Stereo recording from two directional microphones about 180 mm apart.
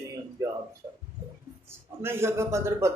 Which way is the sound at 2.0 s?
15° right (ahead or behind).